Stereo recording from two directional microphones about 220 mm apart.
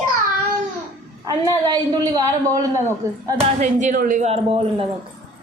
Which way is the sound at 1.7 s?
15° right (ahead or behind).